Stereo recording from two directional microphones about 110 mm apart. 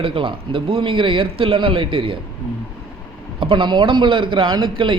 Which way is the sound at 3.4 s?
50° right (ahead or behind).